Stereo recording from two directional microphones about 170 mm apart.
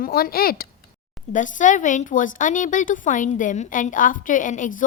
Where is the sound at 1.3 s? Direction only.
50° left (ahead or behind).